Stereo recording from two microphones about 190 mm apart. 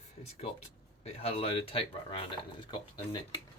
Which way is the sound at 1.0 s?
30° left (ahead or behind).